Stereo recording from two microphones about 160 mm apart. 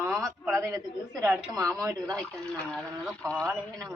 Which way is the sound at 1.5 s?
20° right (ahead or behind).